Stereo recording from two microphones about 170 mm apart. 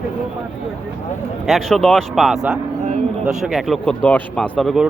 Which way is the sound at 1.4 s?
Centre (ahead or behind).